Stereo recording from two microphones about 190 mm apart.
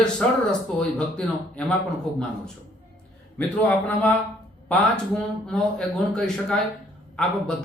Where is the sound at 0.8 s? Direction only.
5° left (ahead or behind).